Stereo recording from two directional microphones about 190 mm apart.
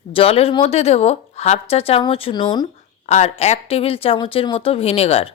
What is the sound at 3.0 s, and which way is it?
Speech, 35° left (ahead or behind).